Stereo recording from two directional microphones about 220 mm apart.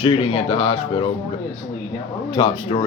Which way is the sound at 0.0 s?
25° left (ahead or behind).